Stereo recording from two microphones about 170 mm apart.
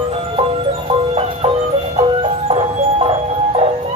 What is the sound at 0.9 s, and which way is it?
Music, 35° right (ahead or behind).